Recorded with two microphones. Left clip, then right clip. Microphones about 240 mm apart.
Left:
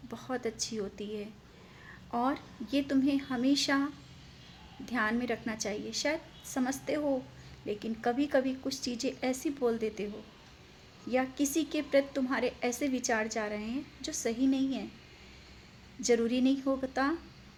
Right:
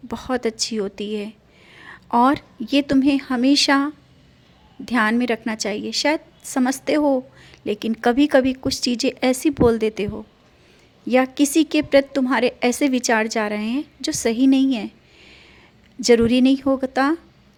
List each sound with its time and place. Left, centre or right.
0.1 s a woman's voice: right
4.9 s a woman's voice: right
11.1 s a woman's voice: right
16.0 s a woman's voice: right